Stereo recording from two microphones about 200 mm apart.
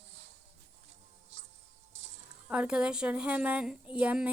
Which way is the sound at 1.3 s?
35° right (ahead or behind).